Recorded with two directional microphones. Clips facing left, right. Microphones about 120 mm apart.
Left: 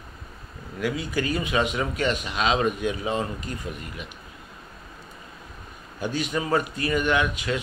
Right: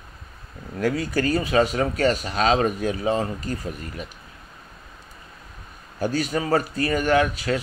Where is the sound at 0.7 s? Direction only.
45° right (ahead or behind).